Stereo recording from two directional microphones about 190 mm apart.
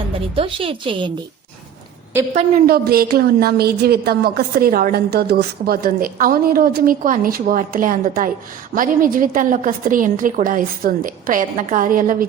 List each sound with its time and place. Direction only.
0.3 s a woman's voice: 30° right (ahead or behind)
2.6 s a woman's voice: 55° right (ahead or behind)